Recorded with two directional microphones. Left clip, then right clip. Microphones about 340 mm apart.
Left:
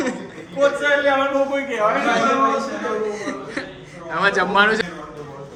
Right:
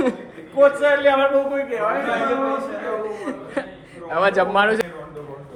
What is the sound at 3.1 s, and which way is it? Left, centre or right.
Speech, centre.